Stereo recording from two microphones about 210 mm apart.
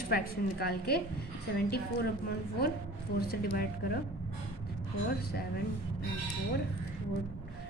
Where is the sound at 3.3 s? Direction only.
45° left (ahead or behind).